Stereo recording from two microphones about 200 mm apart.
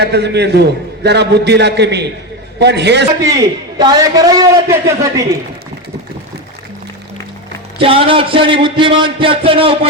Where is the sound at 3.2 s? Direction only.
15° right (ahead or behind).